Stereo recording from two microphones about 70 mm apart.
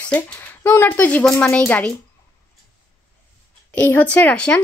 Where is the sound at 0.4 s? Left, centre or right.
Left.